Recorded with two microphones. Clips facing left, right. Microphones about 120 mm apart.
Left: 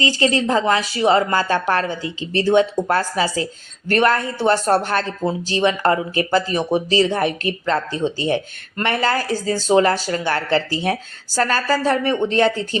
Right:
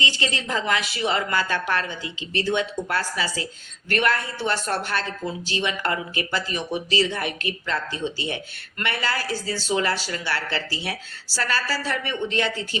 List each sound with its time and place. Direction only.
0.0 s a woman's voice: 40° left (ahead or behind)